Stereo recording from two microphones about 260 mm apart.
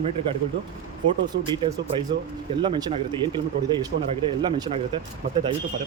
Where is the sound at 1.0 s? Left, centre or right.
Centre.